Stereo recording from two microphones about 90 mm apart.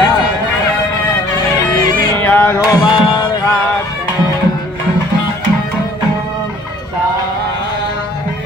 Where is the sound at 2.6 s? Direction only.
45° left (ahead or behind).